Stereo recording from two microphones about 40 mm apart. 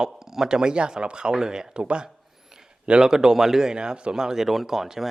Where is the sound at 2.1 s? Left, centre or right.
Centre.